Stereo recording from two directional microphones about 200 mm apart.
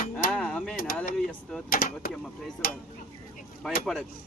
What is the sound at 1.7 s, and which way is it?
Speech, 45° left (ahead or behind).